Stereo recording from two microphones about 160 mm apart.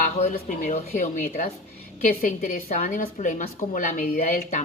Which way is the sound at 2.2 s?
60° left (ahead or behind).